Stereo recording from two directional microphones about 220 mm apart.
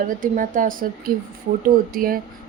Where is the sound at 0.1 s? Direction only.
40° right (ahead or behind).